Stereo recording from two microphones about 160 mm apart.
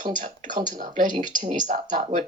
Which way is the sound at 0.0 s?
55° right (ahead or behind).